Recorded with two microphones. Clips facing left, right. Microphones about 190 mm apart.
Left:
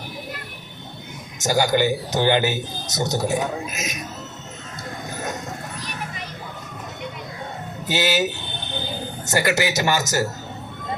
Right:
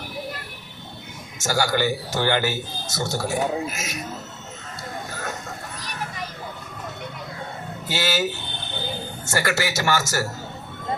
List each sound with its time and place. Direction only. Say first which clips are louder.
1.4 s speech: left 3 dB; 20° left (ahead or behind)
7.9 s speech: left 3 dB; 20° left (ahead or behind)